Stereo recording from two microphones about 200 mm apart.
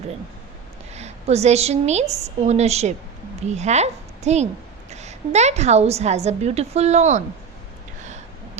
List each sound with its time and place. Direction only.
0.9 s a woman's voice: 35° right (ahead or behind)